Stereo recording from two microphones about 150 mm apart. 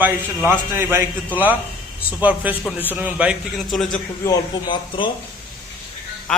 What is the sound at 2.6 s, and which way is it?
Speech, 15° left (ahead or behind).